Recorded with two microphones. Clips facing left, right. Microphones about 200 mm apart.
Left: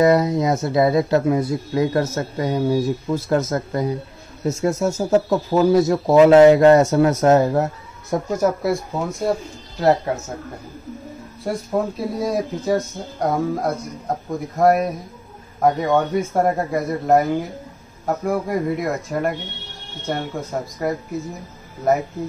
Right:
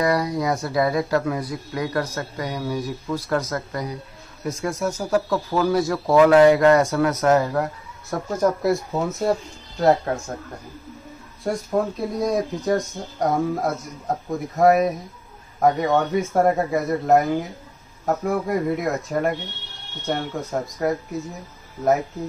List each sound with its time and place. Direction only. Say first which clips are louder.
0.0 s speech: left 6 dB; 25° left (ahead or behind)
8.3 s speech: even; 10° left (ahead or behind)
12.2 s speech: right 1 dB; 5° left (ahead or behind)